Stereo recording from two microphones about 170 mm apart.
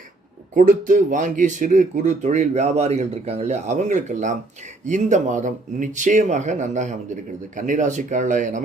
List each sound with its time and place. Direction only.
0.5 s speech: 50° right (ahead or behind)